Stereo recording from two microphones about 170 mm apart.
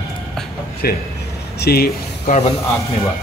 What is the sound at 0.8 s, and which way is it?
A man's voice, 65° left (ahead or behind).